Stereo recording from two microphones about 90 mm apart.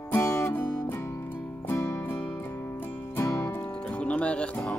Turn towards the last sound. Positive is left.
turn(degrees=10)  # may be behind; listen again after turning